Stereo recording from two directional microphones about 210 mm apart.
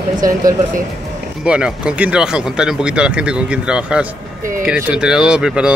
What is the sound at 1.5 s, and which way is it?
Speech, 5° right (ahead or behind).